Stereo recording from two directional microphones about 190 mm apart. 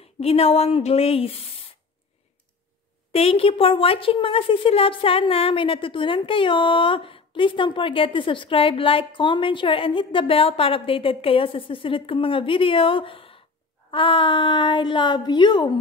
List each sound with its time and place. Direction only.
0.2 s a woman's voice: 30° left (ahead or behind)
3.1 s a woman's voice: 30° left (ahead or behind)